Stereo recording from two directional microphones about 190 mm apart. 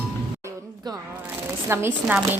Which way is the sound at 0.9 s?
20° right (ahead or behind).